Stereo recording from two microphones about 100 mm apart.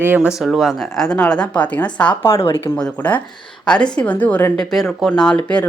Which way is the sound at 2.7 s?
10° left (ahead or behind).